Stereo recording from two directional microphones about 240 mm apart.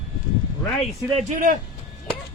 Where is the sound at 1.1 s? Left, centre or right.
Right.